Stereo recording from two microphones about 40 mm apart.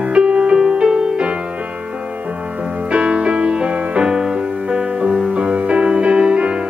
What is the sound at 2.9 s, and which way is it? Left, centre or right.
Music, right.